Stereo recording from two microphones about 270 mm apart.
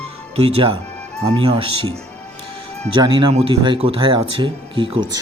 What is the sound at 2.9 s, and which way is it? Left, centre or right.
Speech, centre.